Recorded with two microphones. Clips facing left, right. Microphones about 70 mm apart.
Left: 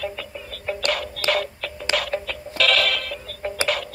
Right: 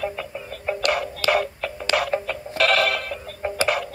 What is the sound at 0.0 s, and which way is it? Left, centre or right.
Music, centre.